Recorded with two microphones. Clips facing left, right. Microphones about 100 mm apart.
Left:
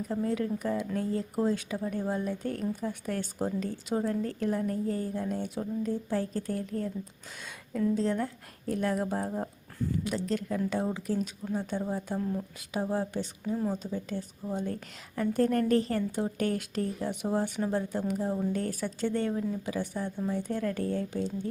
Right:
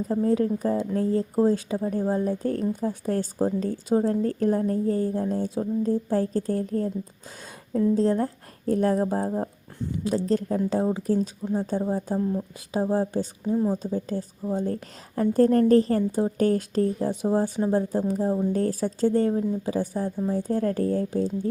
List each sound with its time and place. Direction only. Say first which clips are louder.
0.1 s a woman's voice: right 8 dB; 35° right (ahead or behind)
12.2 s speech: right 6 dB; 15° right (ahead or behind)
12.7 s speech: right 6 dB; 30° right (ahead or behind)
13.4 s a woman's voice: right 7 dB; 20° right (ahead or behind)
13.7 s speech: right 6 dB; 35° right (ahead or behind)